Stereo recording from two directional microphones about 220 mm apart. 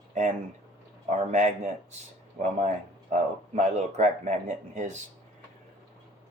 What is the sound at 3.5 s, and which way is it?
Speech, 35° right (ahead or behind).